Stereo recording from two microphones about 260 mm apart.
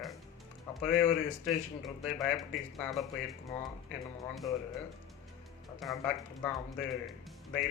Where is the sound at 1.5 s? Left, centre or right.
Centre.